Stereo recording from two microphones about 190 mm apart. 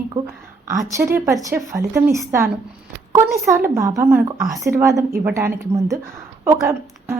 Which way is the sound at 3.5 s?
15° right (ahead or behind).